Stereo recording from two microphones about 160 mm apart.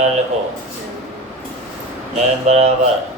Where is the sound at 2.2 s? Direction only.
45° right (ahead or behind).